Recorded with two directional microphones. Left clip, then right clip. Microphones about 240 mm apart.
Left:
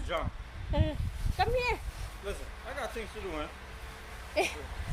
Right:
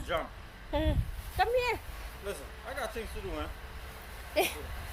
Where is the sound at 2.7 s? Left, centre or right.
Centre.